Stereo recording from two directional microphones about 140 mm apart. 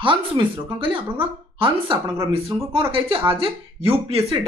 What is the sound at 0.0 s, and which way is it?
Speech, 35° right (ahead or behind).